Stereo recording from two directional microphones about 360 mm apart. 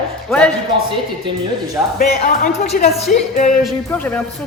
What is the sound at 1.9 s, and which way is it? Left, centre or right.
Speech, left.